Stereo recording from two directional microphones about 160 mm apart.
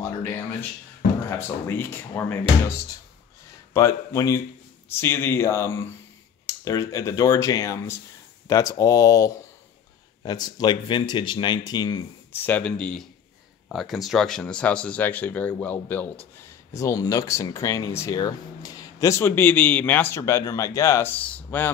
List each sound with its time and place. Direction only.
0.0 s speech: 15° left (ahead or behind)
1.7 s speech: 15° left (ahead or behind)
3.7 s speech: 20° left (ahead or behind)
12.3 s speech: 10° left (ahead or behind)